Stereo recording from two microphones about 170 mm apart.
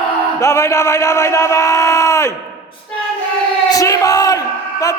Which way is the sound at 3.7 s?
20° left (ahead or behind).